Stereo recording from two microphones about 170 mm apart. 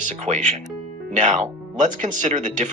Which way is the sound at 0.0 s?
45° right (ahead or behind).